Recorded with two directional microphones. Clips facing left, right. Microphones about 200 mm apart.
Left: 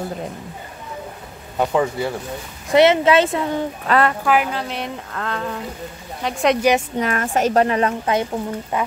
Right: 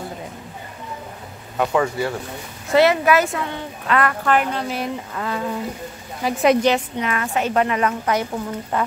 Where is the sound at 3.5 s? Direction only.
35° left (ahead or behind).